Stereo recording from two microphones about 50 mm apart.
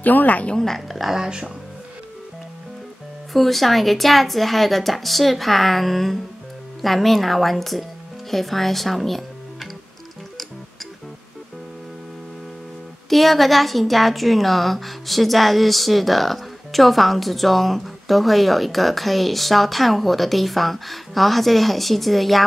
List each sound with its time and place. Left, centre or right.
0.0 s a woman's voice: left
0.6 s speech: centre
0.8 s speech: centre
3.3 s a woman's voice: centre
13.1 s a woman's voice: centre